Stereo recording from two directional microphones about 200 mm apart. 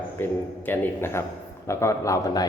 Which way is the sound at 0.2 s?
10° left (ahead or behind).